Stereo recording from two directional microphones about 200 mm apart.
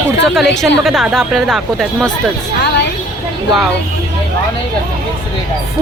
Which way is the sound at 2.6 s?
55° left (ahead or behind).